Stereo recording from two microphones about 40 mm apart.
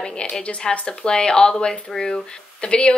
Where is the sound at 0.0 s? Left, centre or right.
Left.